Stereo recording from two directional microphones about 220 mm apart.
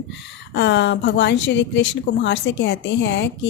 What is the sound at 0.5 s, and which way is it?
A woman's voice, 55° left (ahead or behind).